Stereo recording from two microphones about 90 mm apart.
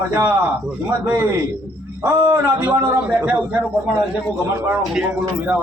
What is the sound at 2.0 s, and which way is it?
A man's voice, 25° right (ahead or behind).